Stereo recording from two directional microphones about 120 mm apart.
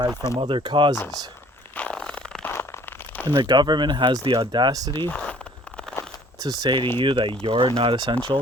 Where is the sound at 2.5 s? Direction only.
20° left (ahead or behind).